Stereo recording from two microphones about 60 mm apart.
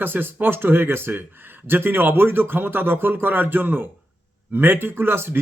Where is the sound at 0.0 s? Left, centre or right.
Right.